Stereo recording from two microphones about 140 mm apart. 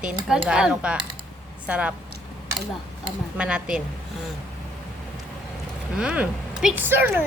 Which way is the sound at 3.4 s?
5° right (ahead or behind).